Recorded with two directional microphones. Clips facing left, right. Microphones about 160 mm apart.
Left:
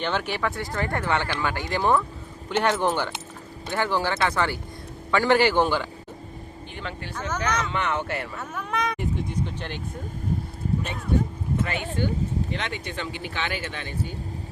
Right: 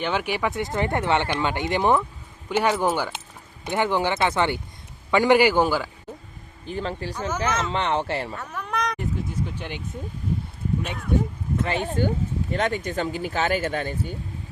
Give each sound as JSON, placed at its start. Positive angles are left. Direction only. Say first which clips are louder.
{"t": 0.0, "sound": "speech", "louder": "right 2 dB", "side_deg": -10}
{"t": 2.5, "sound": "a man's voice", "louder": "right 1 dB", "side_deg": -10}
{"t": 3.7, "sound": "a man's voice", "louder": "right 3 dB", "side_deg": -20}
{"t": 6.7, "sound": "speech", "louder": "right 8 dB", "side_deg": -35}
{"t": 7.1, "sound": "a man's voice", "louder": "right 2 dB", "side_deg": -10}
{"t": 7.7, "sound": "speech", "louder": "right 3 dB", "side_deg": -30}
{"t": 8.4, "sound": "speech", "louder": "even", "side_deg": 0}
{"t": 11.6, "sound": "speech", "louder": "right 5 dB", "side_deg": -35}